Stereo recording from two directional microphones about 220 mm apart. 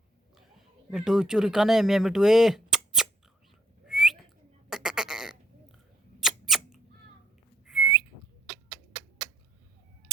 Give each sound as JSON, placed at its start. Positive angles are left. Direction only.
{"t": 0.9, "sound": "speech", "side_deg": -5}
{"t": 3.8, "sound": "whistling", "side_deg": 0}
{"t": 4.7, "sound": "a sound", "side_deg": -5}
{"t": 6.1, "sound": "squeak", "side_deg": 0}